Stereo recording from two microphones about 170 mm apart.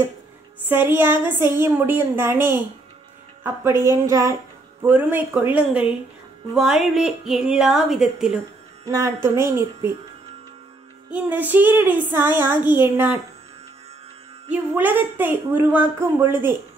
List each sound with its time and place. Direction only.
0.7 s a woman's voice: 10° right (ahead or behind)
8.8 s a woman's voice: 20° right (ahead or behind)
11.1 s a woman's voice: 10° right (ahead or behind)
14.5 s a woman's voice: 10° right (ahead or behind)